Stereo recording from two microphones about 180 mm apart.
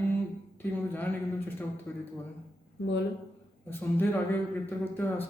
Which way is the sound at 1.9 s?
10° left (ahead or behind).